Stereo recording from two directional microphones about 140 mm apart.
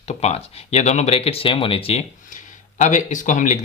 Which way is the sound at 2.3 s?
65° left (ahead or behind).